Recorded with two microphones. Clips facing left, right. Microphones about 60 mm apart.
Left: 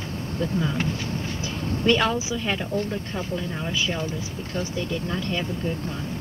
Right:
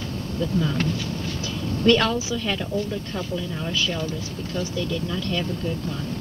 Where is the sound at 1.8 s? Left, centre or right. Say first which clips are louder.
Right 2 dB; left.